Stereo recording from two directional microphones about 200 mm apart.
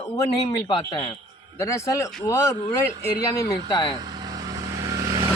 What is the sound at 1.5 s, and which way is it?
Speech, 15° left (ahead or behind).